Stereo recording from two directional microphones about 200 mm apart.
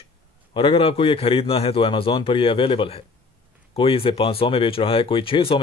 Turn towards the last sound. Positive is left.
turn(degrees=25)  # may be behind; listen again after turning